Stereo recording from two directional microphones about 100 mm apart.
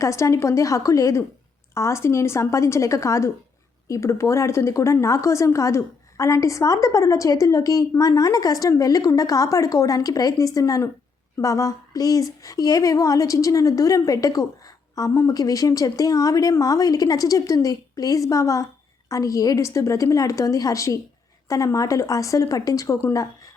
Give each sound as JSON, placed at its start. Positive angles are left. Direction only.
{"t": 0.0, "sound": "a woman's voice", "side_deg": 30}